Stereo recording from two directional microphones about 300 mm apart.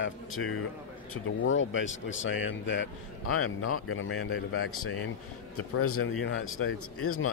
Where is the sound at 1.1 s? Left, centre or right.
Left.